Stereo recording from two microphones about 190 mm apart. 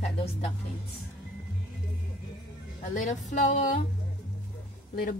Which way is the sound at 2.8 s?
40° left (ahead or behind).